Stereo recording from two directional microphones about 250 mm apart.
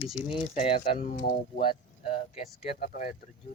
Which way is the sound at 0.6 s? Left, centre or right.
Left.